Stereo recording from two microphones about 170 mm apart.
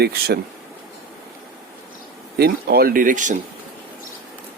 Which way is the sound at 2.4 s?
65° right (ahead or behind).